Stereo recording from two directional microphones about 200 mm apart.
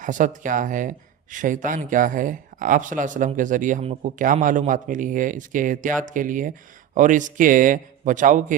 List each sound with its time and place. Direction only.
0.0 s speech: 40° right (ahead or behind)